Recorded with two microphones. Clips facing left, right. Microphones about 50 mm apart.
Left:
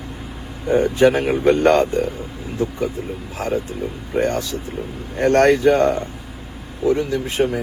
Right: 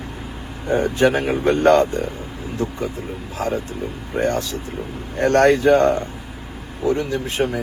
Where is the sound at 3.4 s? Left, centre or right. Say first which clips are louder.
Left 1 dB; right.